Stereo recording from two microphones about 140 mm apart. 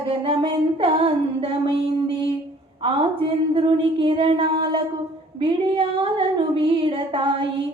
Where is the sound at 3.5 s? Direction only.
40° right (ahead or behind).